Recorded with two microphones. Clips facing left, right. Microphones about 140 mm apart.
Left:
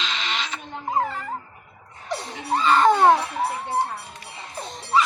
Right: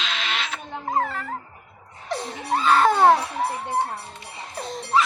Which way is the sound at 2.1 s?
Centre (ahead or behind).